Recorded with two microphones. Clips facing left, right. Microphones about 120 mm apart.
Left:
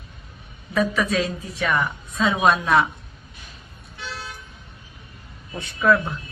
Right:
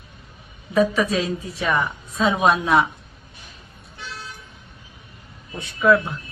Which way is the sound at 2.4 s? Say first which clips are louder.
Even; 10° right (ahead or behind).